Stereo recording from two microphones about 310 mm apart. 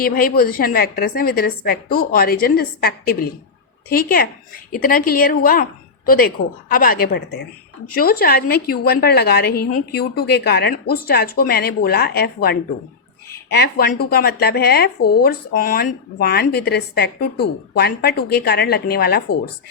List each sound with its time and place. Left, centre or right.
0.0 s a woman's voice: left